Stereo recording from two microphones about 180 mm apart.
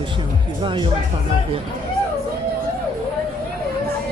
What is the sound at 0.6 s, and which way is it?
Speech, 25° right (ahead or behind).